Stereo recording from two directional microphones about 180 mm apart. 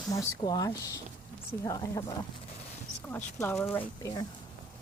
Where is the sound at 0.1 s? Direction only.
20° left (ahead or behind).